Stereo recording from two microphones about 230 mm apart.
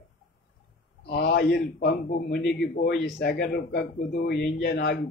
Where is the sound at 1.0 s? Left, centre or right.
Left.